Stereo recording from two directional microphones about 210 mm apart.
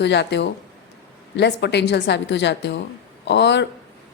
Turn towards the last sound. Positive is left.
turn(degrees=55)  # may be behind; listen again after turning